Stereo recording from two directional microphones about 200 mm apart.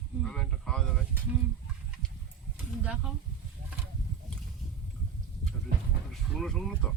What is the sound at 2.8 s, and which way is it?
Speech, 5° right (ahead or behind).